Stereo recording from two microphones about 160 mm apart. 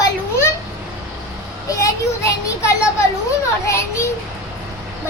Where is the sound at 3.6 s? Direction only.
20° left (ahead or behind).